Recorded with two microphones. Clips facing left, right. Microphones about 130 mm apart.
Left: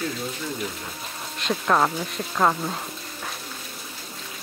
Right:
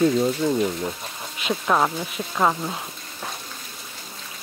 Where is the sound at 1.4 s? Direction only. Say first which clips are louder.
Even; 5° right (ahead or behind).